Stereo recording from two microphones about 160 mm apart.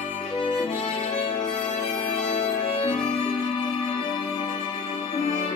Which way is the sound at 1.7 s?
45° left (ahead or behind).